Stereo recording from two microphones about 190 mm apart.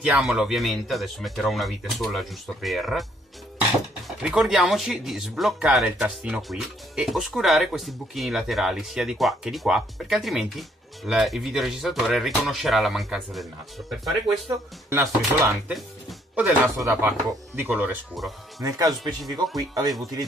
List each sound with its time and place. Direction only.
0.0 s speech: 5° right (ahead or behind)
4.2 s speech: 5° right (ahead or behind)
14.5 s speech: 15° right (ahead or behind)
15.7 s music: centre (ahead or behind)
16.4 s speech: 15° right (ahead or behind)
18.6 s speech: 20° right (ahead or behind)